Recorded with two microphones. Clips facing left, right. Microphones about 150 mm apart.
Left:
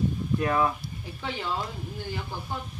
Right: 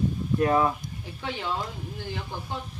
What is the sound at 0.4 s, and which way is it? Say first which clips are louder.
Speech: right 4 dB; 25° right (ahead or behind).